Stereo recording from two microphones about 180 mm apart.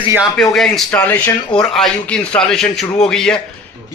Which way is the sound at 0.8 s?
10° left (ahead or behind).